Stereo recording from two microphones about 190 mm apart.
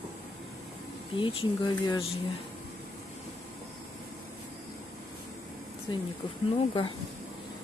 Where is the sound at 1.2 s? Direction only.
30° left (ahead or behind).